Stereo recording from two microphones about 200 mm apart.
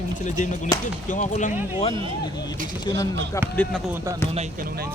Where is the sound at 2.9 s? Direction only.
20° left (ahead or behind).